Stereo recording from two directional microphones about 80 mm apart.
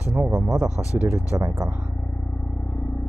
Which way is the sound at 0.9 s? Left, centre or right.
Centre.